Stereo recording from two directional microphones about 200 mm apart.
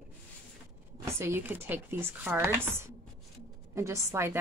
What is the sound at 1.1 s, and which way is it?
Speech, 15° right (ahead or behind).